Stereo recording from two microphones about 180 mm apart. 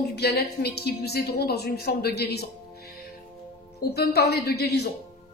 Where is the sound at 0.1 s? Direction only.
65° left (ahead or behind).